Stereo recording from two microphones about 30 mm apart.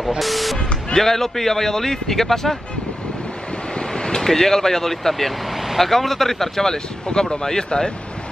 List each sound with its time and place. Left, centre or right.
0.2 s vehicle: centre
0.6 s music: left
0.9 s a man's voice: centre
3.7 s vehicle: left
4.2 s a man's voice: centre